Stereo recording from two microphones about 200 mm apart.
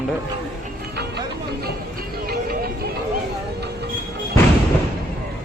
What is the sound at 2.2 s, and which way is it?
Music, 50° right (ahead or behind).